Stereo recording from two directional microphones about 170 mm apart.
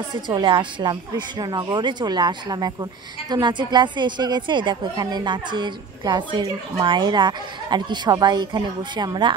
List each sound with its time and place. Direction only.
0.3 s a woman's voice: 25° right (ahead or behind)